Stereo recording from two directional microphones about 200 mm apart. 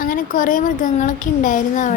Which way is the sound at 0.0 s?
45° left (ahead or behind).